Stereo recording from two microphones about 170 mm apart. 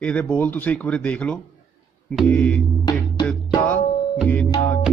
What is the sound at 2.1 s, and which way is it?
Music, 5° left (ahead or behind).